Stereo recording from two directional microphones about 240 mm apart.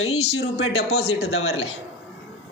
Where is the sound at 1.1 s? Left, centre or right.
Left.